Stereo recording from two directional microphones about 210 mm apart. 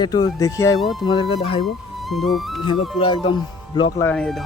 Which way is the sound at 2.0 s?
Centre (ahead or behind).